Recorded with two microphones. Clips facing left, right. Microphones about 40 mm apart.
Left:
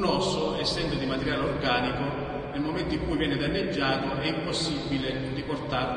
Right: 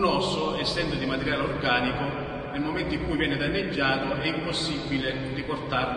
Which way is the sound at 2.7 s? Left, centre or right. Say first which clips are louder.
Right 1 dB; centre.